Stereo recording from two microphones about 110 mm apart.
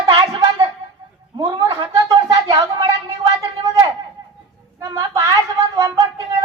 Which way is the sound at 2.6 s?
50° right (ahead or behind).